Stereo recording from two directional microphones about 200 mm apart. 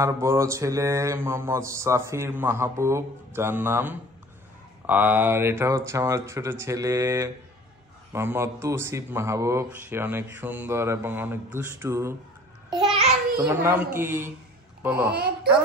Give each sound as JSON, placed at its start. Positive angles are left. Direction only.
{"t": 0.0, "sound": "speech", "side_deg": -15}
{"t": 12.6, "sound": "babbling", "side_deg": -20}
{"t": 13.5, "sound": "speech", "side_deg": -10}